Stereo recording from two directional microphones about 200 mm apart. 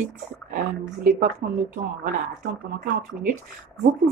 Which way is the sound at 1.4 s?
50° right (ahead or behind).